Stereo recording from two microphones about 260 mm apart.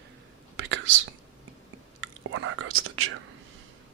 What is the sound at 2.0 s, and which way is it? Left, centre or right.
Whispering, right.